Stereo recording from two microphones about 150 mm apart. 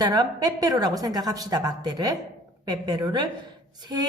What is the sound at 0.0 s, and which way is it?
A woman's voice, 25° right (ahead or behind).